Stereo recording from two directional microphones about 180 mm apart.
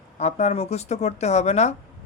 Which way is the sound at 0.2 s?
35° left (ahead or behind).